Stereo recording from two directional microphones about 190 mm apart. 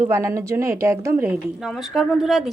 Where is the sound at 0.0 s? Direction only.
15° right (ahead or behind).